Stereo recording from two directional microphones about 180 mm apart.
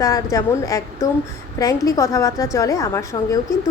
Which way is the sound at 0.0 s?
20° left (ahead or behind).